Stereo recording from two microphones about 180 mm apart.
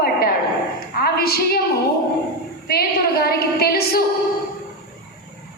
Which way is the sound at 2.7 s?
55° left (ahead or behind).